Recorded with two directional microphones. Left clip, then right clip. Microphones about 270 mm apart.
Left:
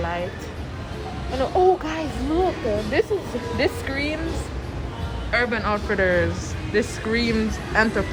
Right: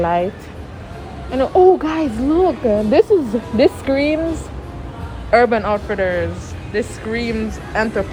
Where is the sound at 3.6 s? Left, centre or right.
Centre.